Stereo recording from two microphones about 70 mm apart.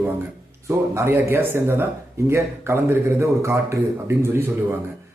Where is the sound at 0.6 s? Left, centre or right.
Right.